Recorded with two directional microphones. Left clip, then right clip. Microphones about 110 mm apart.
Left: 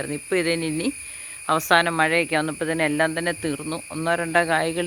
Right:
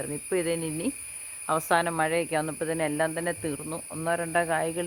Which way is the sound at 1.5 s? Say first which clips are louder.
Left 6 dB; 35° left (ahead or behind).